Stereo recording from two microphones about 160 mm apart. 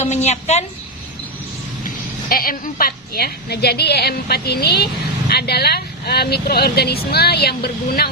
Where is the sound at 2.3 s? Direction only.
65° left (ahead or behind).